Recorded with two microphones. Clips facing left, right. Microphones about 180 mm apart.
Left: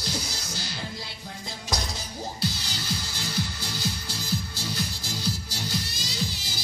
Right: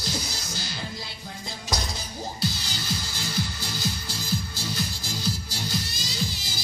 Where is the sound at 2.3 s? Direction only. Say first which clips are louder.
Right 1 dB; 60° left (ahead or behind).